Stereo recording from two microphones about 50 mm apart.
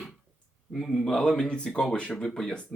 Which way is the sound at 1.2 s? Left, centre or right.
Centre.